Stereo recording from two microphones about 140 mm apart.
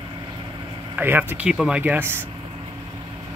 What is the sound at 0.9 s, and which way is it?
Speech, 15° right (ahead or behind).